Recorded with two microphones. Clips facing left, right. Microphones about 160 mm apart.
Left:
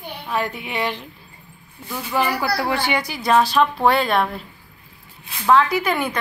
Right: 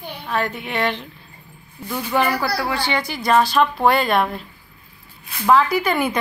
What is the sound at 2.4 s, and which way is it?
Speech, 20° left (ahead or behind).